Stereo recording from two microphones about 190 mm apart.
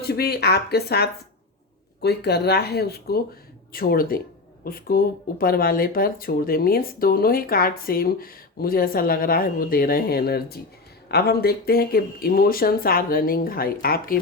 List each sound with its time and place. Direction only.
0.0 s speech: 55° left (ahead or behind)